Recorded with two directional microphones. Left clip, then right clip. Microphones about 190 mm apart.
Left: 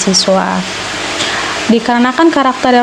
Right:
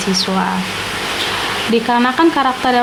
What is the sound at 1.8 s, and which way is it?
Speech, 30° left (ahead or behind).